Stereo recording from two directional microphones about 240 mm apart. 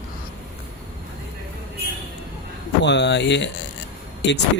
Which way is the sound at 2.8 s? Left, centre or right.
Left.